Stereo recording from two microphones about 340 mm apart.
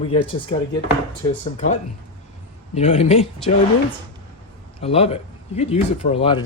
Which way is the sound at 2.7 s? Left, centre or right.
Centre.